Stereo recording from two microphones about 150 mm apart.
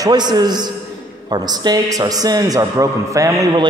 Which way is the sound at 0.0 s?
25° right (ahead or behind).